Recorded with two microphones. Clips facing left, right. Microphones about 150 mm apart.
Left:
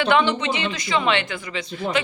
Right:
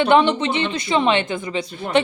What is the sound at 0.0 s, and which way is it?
Speech, 25° right (ahead or behind).